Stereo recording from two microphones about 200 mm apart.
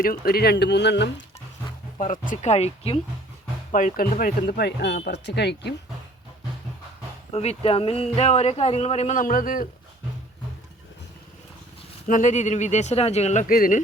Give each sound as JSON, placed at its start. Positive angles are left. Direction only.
{"t": 0.0, "sound": "speech", "side_deg": 50}
{"t": 2.0, "sound": "speech", "side_deg": 40}
{"t": 3.7, "sound": "speech", "side_deg": 40}
{"t": 7.3, "sound": "speech", "side_deg": 30}
{"t": 12.0, "sound": "speech", "side_deg": 40}